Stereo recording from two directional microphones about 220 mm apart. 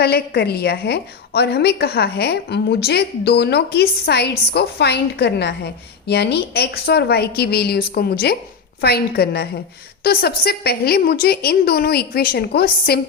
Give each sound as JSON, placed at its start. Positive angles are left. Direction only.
{"t": 0.0, "sound": "a woman's voice", "side_deg": 45}